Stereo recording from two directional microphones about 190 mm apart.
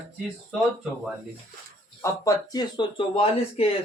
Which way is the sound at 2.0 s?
20° left (ahead or behind).